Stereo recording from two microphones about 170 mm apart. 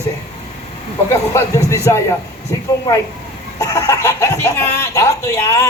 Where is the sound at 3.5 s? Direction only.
20° left (ahead or behind).